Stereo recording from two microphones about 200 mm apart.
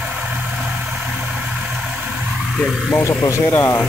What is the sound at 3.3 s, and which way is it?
Speech, 15° left (ahead or behind).